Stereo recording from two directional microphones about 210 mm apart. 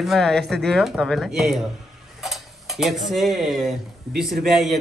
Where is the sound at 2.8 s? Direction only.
Centre (ahead or behind).